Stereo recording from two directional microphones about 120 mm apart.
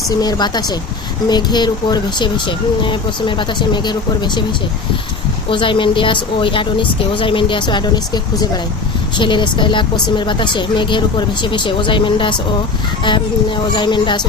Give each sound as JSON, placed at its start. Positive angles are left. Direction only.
{"t": 0.2, "sound": "a woman's voice", "side_deg": 35}
{"t": 5.5, "sound": "a woman's voice", "side_deg": 45}
{"t": 13.7, "sound": "a woman's voice", "side_deg": 40}